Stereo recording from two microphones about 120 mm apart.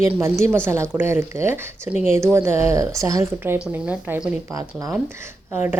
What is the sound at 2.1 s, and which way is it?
Speech, 20° right (ahead or behind).